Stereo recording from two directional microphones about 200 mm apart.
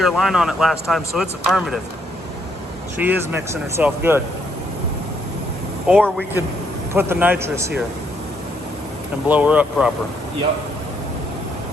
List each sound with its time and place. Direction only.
0.0 s a man's voice: centre (ahead or behind)
3.0 s a man's voice: 5° right (ahead or behind)
5.9 s a man's voice: 5° right (ahead or behind)
9.3 s a man's voice: 5° right (ahead or behind)